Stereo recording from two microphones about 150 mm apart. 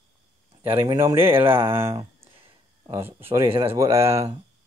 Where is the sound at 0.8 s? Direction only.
20° right (ahead or behind).